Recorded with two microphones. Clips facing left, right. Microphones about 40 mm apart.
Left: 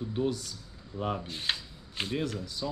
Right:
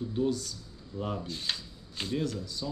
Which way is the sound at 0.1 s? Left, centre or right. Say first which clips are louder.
Right 1 dB; left.